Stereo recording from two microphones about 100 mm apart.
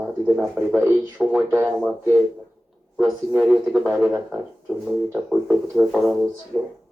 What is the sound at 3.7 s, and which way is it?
Speech, 10° right (ahead or behind).